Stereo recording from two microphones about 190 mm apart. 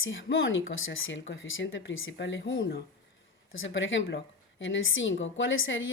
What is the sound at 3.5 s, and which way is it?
A woman's voice, 90° left.